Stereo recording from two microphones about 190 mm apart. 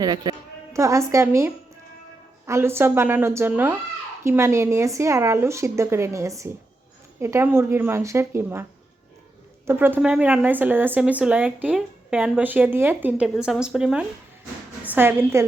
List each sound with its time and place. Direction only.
0.0 s a woman's voice: 20° right (ahead or behind)
9.6 s a woman's voice: 10° right (ahead or behind)